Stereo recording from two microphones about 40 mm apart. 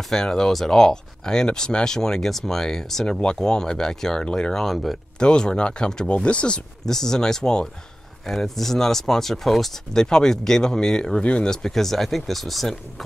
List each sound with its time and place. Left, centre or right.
0.1 s speech: centre
3.1 s speech: left
6.9 s speech: centre
9.9 s speech: centre
11.5 s speech: centre